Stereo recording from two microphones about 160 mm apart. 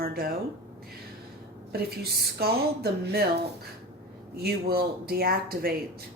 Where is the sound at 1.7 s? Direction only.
75° right (ahead or behind).